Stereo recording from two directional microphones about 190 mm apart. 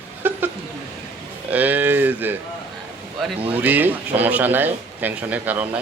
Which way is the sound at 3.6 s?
10° right (ahead or behind).